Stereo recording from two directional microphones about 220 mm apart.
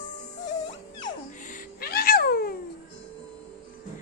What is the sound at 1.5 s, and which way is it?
Cat, 45° left (ahead or behind).